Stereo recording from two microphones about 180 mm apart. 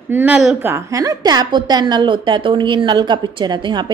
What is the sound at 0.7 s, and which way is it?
A woman's voice, 20° right (ahead or behind).